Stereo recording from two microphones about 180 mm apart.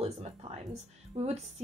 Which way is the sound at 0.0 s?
35° right (ahead or behind).